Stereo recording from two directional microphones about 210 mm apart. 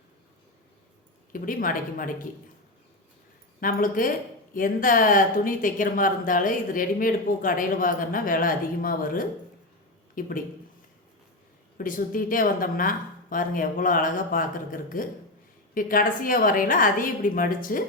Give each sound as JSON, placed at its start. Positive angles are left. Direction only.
{"t": 1.3, "sound": "speech", "side_deg": 40}
{"t": 3.6, "sound": "speech", "side_deg": 40}
{"t": 11.8, "sound": "speech", "side_deg": 40}